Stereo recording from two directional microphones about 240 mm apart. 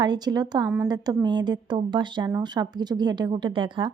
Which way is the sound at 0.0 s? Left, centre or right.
Centre.